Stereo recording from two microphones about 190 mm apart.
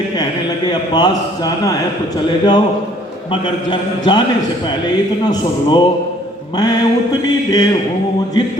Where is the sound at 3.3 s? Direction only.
25° left (ahead or behind).